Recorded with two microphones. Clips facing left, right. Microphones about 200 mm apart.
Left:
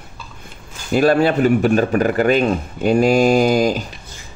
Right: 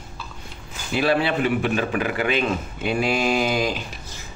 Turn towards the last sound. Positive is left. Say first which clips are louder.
# left 8 dB
turn(degrees=45)  # may be behind; listen again after turning